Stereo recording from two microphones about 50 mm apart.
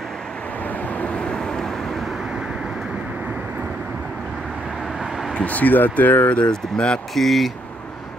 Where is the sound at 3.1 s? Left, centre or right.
Right.